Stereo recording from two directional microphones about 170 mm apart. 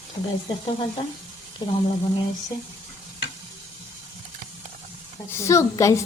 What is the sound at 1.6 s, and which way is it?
Speech, 25° left (ahead or behind).